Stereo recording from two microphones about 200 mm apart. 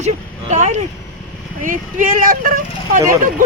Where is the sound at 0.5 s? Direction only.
35° right (ahead or behind).